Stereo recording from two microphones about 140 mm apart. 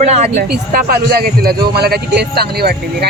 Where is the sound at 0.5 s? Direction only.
85° right.